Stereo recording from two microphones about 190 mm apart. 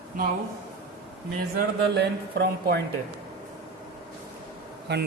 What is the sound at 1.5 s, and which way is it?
Speech, 60° right (ahead or behind).